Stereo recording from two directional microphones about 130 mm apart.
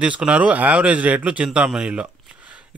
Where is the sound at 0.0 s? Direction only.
10° right (ahead or behind).